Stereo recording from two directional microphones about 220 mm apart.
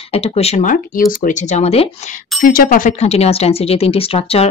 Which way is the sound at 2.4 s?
40° left (ahead or behind).